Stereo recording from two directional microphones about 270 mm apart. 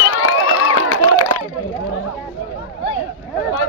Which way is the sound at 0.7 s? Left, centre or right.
Left.